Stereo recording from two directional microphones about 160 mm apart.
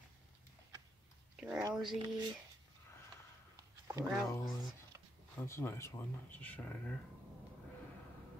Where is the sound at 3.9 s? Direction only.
20° right (ahead or behind).